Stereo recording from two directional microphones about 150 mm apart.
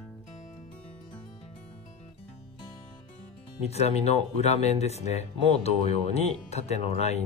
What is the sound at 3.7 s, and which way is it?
Speech, 45° left (ahead or behind).